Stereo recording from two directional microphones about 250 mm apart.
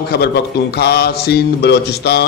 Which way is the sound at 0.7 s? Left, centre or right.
Left.